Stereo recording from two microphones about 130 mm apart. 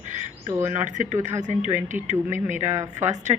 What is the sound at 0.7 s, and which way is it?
A woman's voice, 70° right (ahead or behind).